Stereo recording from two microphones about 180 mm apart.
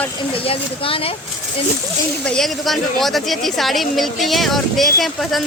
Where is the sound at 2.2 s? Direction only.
5° left (ahead or behind).